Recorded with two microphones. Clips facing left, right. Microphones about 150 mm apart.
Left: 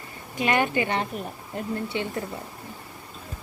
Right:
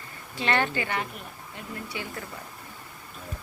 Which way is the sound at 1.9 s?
25° left (ahead or behind).